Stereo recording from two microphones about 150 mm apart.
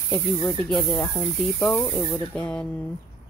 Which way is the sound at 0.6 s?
5° left (ahead or behind).